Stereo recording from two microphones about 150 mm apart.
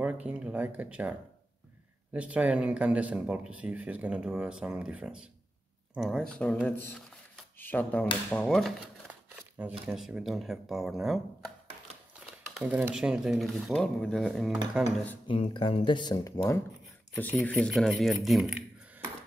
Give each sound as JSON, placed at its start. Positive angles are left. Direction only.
{"t": 0.0, "sound": "speech", "side_deg": -10}
{"t": 2.1, "sound": "speech", "side_deg": -10}
{"t": 12.5, "sound": "speech", "side_deg": -10}
{"t": 15.2, "sound": "speech", "side_deg": 35}
{"t": 17.2, "sound": "speech", "side_deg": 10}
{"t": 17.6, "sound": "speech", "side_deg": 0}